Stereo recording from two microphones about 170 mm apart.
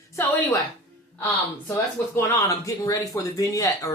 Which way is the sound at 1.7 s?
15° left (ahead or behind).